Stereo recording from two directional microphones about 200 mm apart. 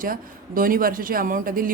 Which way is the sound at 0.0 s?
45° right (ahead or behind).